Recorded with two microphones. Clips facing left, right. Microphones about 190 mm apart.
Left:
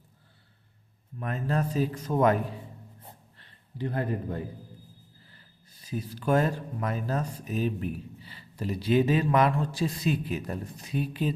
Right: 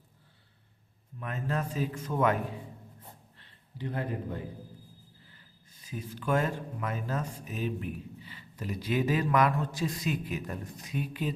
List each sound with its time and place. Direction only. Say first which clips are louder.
1.2 s speech: left 4 dB; 40° left (ahead or behind)
3.3 s a sound: left 7 dB; 45° left (ahead or behind)
5.9 s speech: left 4 dB; 35° left (ahead or behind)